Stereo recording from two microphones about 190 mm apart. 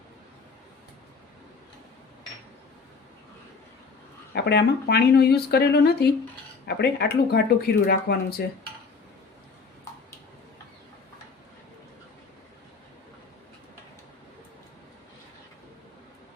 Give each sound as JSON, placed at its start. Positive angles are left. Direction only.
{"t": 4.4, "sound": "speech", "side_deg": 60}